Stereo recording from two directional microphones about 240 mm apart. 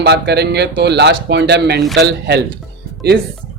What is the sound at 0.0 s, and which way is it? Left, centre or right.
Speech, right.